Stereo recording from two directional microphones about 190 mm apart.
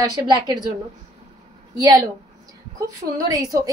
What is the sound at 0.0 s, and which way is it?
Speech, 20° right (ahead or behind).